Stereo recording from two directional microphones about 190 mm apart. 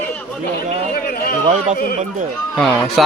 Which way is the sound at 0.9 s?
55° left (ahead or behind).